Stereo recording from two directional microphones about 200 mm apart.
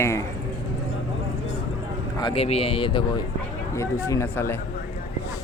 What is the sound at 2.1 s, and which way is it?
A man's voice, 25° left (ahead or behind).